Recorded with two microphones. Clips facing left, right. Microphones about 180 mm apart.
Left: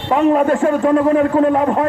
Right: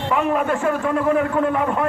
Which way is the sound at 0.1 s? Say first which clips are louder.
Left 7 dB; 35° left (ahead or behind).